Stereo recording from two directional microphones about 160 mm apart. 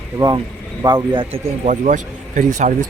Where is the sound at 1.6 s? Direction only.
50° right (ahead or behind).